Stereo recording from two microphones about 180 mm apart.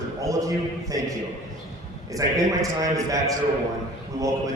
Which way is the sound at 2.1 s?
20° right (ahead or behind).